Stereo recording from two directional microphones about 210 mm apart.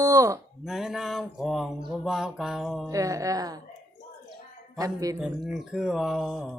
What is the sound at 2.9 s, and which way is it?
Speech, 15° right (ahead or behind).